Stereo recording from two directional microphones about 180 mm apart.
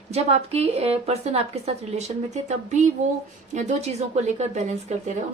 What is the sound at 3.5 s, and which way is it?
A woman's voice, 40° right (ahead or behind).